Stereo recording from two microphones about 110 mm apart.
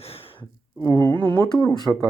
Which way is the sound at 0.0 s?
60° left (ahead or behind).